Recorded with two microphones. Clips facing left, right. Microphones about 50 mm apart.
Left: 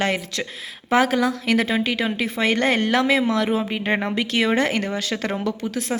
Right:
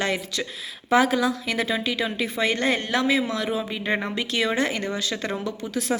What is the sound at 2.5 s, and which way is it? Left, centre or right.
Speech, left.